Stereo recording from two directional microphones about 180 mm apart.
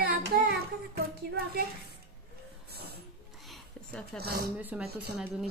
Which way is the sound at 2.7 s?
60° right (ahead or behind).